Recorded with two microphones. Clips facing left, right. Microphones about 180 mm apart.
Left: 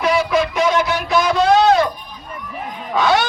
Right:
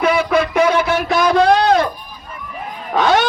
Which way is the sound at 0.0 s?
60° right (ahead or behind).